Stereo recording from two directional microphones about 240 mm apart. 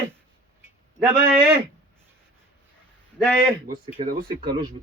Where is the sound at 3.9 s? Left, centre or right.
Right.